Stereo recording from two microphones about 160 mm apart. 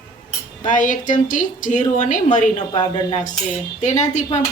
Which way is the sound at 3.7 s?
50° left (ahead or behind).